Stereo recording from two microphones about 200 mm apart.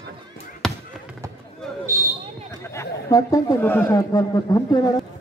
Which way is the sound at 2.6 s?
15° left (ahead or behind).